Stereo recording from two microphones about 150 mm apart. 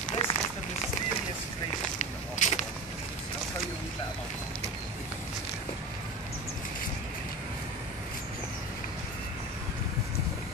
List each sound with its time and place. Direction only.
0.1 s run: 35° left (ahead or behind)
2.0 s crackle: 50° left (ahead or behind)